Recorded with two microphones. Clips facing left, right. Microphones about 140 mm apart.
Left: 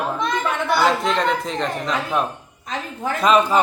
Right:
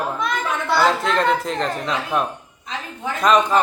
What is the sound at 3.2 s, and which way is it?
Speech, 5° left (ahead or behind).